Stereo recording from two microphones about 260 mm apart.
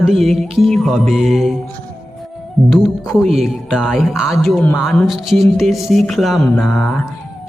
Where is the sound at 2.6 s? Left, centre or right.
Centre.